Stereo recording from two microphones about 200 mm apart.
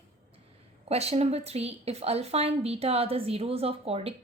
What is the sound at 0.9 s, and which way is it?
A woman's voice, 30° right (ahead or behind).